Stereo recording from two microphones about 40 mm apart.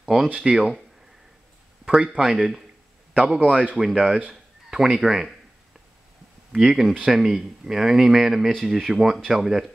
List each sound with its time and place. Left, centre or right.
0.0 s speech: centre
2.0 s speech: centre
3.4 s speech: right
3.7 s speech: centre
6.5 s speech: centre